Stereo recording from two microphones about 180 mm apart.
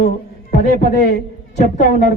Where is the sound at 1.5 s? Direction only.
45° left (ahead or behind).